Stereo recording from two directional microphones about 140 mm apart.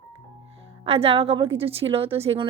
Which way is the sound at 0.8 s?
45° right (ahead or behind).